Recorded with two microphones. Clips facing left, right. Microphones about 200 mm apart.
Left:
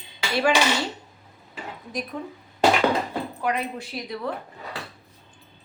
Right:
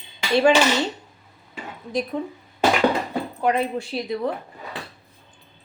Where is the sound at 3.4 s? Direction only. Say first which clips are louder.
Right 7 dB; 25° right (ahead or behind).